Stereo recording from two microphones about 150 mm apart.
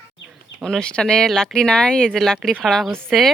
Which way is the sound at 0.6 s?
5° left (ahead or behind).